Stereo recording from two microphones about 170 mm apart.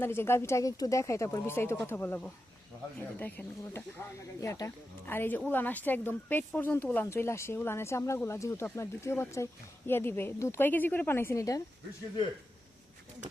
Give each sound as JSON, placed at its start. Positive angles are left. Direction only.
{"t": 0.0, "sound": "a woman's voice", "side_deg": 15}